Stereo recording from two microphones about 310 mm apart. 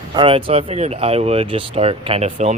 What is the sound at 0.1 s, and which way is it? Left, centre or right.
Speech, centre.